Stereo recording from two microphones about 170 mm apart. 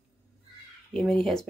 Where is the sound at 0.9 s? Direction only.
5° left (ahead or behind).